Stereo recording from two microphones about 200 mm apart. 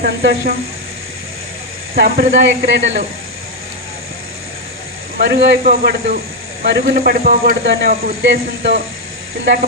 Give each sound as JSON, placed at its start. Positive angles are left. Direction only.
{"t": 0.0, "sound": "speech", "side_deg": -55}
{"t": 2.0, "sound": "speech", "side_deg": -55}
{"t": 5.1, "sound": "speech", "side_deg": -55}
{"t": 6.9, "sound": "speech", "side_deg": -45}